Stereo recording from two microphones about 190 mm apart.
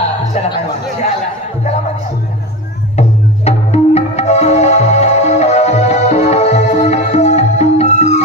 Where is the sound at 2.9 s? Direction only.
35° left (ahead or behind).